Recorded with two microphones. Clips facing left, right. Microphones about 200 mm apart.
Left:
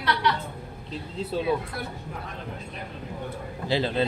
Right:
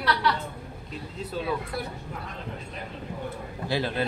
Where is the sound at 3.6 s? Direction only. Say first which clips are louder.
Left 3 dB; 20° left (ahead or behind).